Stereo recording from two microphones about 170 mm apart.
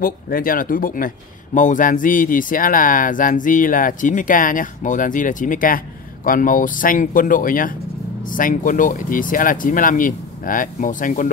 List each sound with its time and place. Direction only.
0.0 s speech: 55° left (ahead or behind)